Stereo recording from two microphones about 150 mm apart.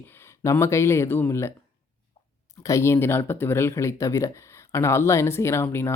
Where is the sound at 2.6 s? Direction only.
20° left (ahead or behind).